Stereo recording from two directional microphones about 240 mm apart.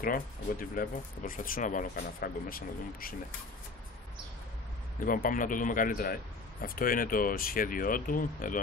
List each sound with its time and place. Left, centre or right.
0.0 s speech: left
5.0 s speech: left